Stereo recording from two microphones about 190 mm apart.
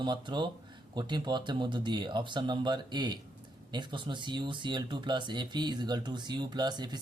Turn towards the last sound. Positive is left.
turn(degrees=-20)  # may be behind; listen again after turning